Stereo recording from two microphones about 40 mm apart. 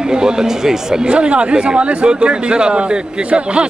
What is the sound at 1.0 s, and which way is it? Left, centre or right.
Speech, right.